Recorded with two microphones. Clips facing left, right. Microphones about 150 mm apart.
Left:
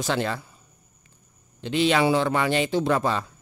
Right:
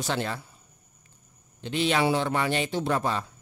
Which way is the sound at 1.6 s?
90° left.